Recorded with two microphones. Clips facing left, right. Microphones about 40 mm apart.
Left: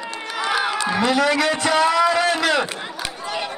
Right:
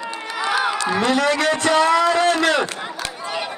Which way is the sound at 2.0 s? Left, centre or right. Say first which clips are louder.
Right 1 dB; centre.